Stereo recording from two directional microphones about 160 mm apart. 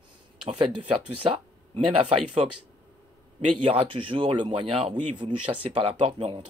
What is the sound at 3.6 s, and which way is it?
Speech, 35° right (ahead or behind).